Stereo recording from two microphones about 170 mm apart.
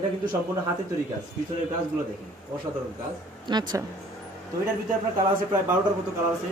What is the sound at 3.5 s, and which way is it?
Speech, 25° right (ahead or behind).